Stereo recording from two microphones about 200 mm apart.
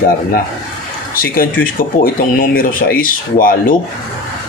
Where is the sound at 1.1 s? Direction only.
45° left (ahead or behind).